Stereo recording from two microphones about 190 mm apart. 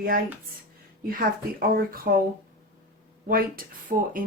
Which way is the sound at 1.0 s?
50° right (ahead or behind).